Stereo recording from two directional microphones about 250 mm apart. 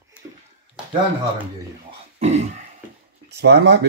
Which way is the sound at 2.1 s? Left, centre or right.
Right.